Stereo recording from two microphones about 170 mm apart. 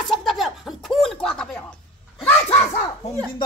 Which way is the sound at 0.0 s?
Centre (ahead or behind).